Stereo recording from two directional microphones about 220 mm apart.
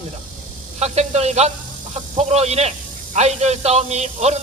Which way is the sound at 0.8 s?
30° right (ahead or behind).